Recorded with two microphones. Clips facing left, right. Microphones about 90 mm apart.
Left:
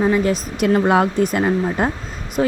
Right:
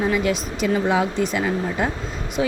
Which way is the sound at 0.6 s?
55° left (ahead or behind).